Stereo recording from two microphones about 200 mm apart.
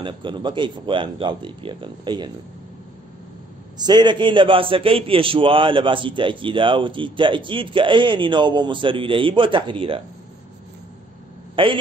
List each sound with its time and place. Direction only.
0.0 s a man's voice: 25° right (ahead or behind)
3.7 s a man's voice: 20° right (ahead or behind)
11.6 s a man's voice: 25° right (ahead or behind)